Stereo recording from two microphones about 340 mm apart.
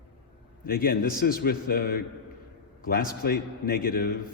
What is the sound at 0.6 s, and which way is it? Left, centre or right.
A man's voice, left.